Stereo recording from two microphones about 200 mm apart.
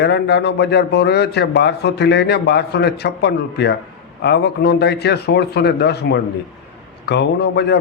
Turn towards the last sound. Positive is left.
turn(degrees=55)  # may be behind; listen again after turning